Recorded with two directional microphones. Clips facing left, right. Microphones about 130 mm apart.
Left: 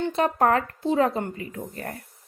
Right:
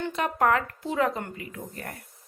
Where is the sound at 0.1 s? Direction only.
35° left (ahead or behind).